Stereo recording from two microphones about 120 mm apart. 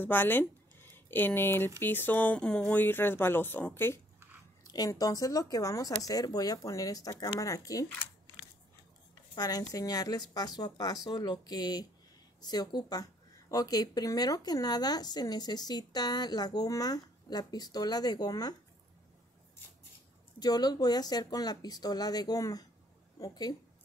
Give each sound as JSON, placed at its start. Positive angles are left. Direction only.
{"t": 0.0, "sound": "speech", "side_deg": 15}
{"t": 4.6, "sound": "speech", "side_deg": 30}
{"t": 9.3, "sound": "speech", "side_deg": 35}
{"t": 20.3, "sound": "speech", "side_deg": 35}